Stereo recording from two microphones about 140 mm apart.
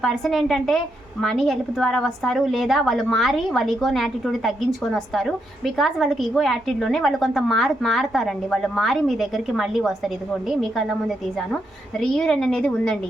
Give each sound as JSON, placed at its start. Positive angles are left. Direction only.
{"t": 0.0, "sound": "a woman's voice", "side_deg": 0}